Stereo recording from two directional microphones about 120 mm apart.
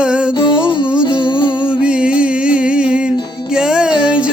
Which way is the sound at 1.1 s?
45° left (ahead or behind).